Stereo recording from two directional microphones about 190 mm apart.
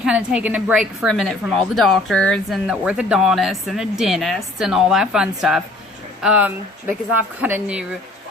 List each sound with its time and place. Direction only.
0.0 s a woman's voice: 5° right (ahead or behind)